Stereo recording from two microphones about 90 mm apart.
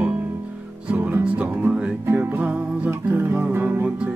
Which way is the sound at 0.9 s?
20° right (ahead or behind).